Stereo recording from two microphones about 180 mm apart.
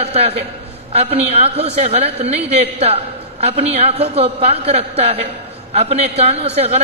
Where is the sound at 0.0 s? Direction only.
35° right (ahead or behind).